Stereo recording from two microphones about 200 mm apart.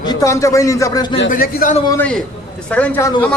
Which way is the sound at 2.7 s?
5° left (ahead or behind).